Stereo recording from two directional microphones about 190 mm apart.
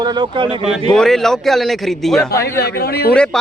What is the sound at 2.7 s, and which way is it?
Speech, 55° left (ahead or behind).